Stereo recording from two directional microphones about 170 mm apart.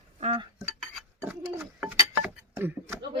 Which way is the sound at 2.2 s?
10° right (ahead or behind).